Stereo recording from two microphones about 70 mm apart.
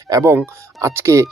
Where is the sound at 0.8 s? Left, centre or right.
Right.